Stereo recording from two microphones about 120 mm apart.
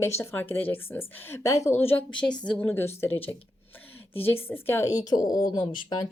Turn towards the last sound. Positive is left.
turn(degrees=40)  # may be behind; listen again after turning